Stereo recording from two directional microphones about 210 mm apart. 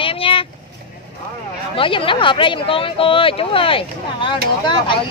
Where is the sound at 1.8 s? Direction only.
25° left (ahead or behind).